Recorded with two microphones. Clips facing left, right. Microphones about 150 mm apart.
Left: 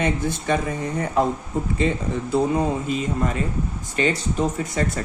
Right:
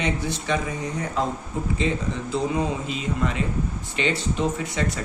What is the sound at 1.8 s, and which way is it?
A woman's voice, 50° left (ahead or behind).